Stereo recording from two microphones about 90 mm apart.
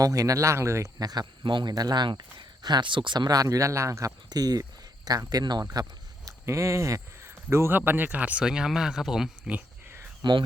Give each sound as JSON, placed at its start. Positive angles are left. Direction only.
{"t": 0.0, "sound": "speech", "side_deg": -40}
{"t": 4.3, "sound": "speech", "side_deg": -45}
{"t": 6.2, "sound": "speech", "side_deg": -35}
{"t": 10.2, "sound": "speech", "side_deg": -55}